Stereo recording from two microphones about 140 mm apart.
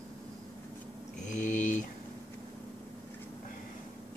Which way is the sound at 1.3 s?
60° left (ahead or behind).